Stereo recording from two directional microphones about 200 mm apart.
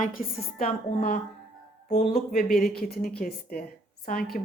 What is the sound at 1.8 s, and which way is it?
A woman's voice, 35° left (ahead or behind).